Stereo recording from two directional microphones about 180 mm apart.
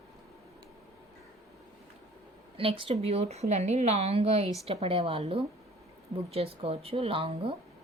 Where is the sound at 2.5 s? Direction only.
30° right (ahead or behind).